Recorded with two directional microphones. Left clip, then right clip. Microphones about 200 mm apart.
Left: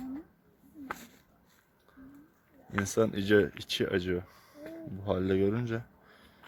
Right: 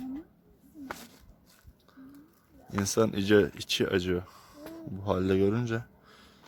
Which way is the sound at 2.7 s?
5° right (ahead or behind).